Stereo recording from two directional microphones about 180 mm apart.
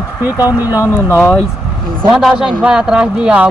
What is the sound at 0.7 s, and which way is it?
Speech, 15° left (ahead or behind).